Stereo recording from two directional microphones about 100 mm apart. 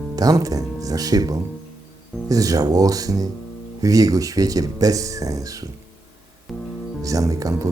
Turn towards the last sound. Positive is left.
turn(degrees=-35)  # may be behind; listen again after turning